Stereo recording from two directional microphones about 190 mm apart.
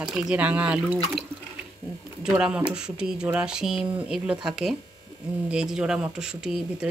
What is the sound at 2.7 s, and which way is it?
Speech, 5° right (ahead or behind).